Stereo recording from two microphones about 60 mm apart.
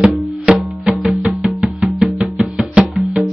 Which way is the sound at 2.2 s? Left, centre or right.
Centre.